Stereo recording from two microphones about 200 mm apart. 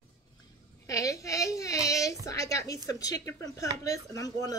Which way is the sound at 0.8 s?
15° left (ahead or behind).